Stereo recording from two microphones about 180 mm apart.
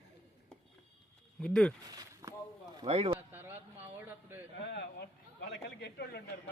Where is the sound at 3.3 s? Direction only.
10° right (ahead or behind).